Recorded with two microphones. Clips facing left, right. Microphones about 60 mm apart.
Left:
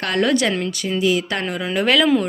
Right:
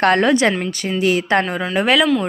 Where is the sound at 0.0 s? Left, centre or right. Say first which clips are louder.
Right 6 dB; right.